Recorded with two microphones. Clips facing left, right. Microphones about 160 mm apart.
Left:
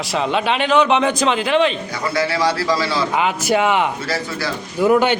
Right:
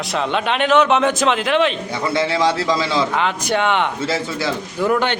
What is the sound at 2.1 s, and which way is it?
Speech, 20° right (ahead or behind).